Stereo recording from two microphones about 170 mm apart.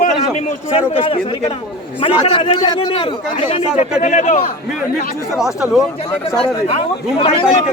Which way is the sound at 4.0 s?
45° left (ahead or behind).